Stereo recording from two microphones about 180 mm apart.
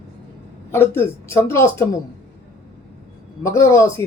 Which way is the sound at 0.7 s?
15° left (ahead or behind).